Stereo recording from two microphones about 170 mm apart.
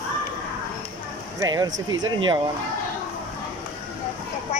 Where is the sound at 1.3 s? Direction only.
20° right (ahead or behind).